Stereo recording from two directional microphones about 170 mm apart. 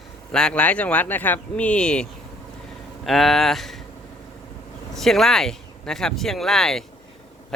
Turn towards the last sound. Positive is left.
turn(degrees=0)  # may be behind; listen again after turning